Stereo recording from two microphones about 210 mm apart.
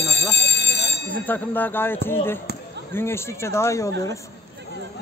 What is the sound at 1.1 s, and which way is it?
Speech, 10° left (ahead or behind).